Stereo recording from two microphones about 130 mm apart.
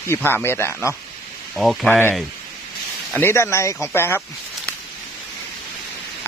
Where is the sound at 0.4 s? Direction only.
20° left (ahead or behind).